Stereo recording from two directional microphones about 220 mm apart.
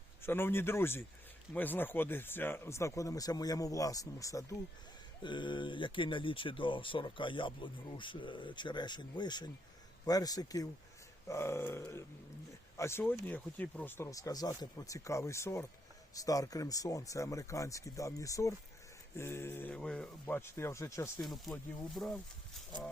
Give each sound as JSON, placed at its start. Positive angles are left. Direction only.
{"t": 0.2, "sound": "speech", "side_deg": 10}
{"t": 21.2, "sound": "speech", "side_deg": 0}